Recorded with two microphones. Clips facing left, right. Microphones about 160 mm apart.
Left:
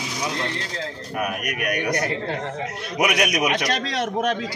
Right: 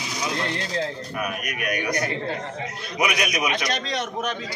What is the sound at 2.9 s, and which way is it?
A man's voice, 70° left (ahead or behind).